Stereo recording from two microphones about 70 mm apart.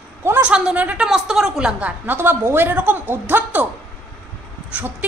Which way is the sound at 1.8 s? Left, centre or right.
Right.